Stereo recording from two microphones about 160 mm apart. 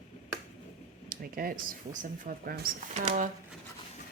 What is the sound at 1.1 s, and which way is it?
Speech, 65° right (ahead or behind).